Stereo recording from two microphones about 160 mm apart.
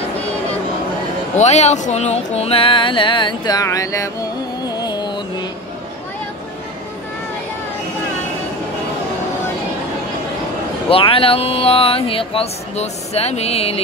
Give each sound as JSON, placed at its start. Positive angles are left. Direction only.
{"t": 1.4, "sound": "music", "side_deg": 45}
{"t": 10.9, "sound": "speech", "side_deg": 35}